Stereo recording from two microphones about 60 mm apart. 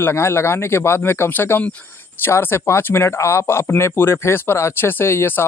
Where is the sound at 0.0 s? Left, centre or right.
Left.